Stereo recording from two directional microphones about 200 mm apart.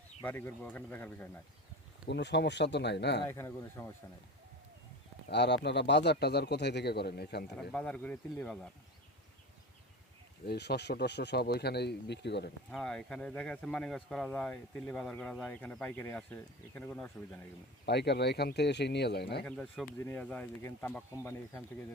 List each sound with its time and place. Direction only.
0.2 s speech: 10° left (ahead or behind)
2.0 s speech: 60° left (ahead or behind)
3.2 s speech: 15° left (ahead or behind)
5.3 s speech: 60° left (ahead or behind)
7.7 s speech: 5° left (ahead or behind)
10.4 s speech: 55° left (ahead or behind)
12.7 s speech: 5° left (ahead or behind)
17.8 s speech: 55° left (ahead or behind)
19.5 s speech: 5° left (ahead or behind)